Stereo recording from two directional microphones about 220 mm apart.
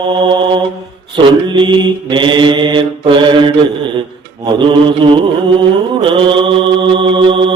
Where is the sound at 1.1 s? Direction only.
20° right (ahead or behind).